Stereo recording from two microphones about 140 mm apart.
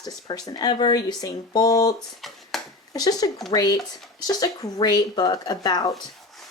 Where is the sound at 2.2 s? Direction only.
Centre (ahead or behind).